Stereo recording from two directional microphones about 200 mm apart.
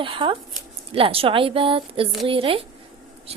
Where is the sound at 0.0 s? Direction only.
25° right (ahead or behind).